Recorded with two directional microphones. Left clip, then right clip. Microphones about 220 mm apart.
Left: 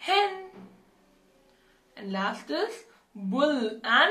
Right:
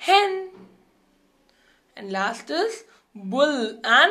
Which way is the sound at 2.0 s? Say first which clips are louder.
Right 5 dB; 45° right (ahead or behind).